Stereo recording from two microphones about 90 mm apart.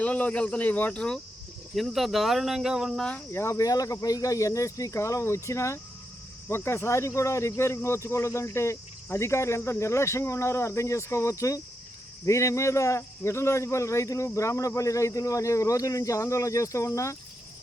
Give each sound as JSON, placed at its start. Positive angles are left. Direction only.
{"t": 0.0, "sound": "speech", "side_deg": 15}
{"t": 1.7, "sound": "speech", "side_deg": 0}
{"t": 3.0, "sound": "speech", "side_deg": 15}
{"t": 3.3, "sound": "a man's voice", "side_deg": 35}